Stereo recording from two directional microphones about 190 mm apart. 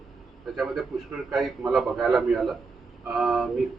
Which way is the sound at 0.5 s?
Centre (ahead or behind).